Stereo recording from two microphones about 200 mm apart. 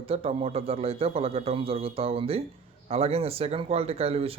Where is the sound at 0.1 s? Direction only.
30° right (ahead or behind).